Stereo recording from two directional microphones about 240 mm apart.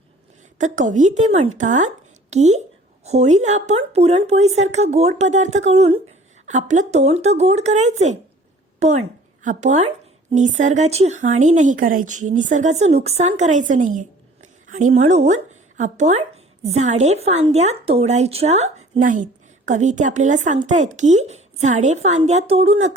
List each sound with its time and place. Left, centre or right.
0.6 s speech: right